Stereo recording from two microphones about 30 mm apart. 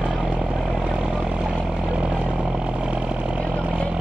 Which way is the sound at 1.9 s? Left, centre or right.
Right.